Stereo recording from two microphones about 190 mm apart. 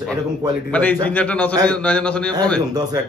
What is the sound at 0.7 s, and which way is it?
A man's voice, 5° left (ahead or behind).